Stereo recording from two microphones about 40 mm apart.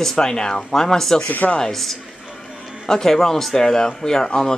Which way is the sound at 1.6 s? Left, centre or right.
Centre.